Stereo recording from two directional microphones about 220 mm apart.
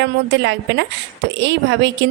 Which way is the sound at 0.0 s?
55° right (ahead or behind).